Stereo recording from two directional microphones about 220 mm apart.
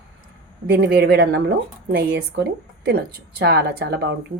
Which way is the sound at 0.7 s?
45° right (ahead or behind).